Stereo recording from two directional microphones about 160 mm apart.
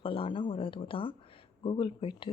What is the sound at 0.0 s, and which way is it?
Speech, 35° left (ahead or behind).